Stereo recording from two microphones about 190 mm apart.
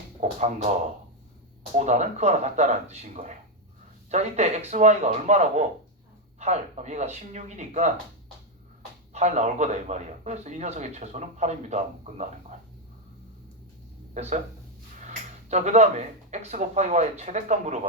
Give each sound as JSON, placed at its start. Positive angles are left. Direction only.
{"t": 0.2, "sound": "speech", "side_deg": -40}
{"t": 1.7, "sound": "speech", "side_deg": -40}
{"t": 9.1, "sound": "speech", "side_deg": -35}
{"t": 14.1, "sound": "speech", "side_deg": -35}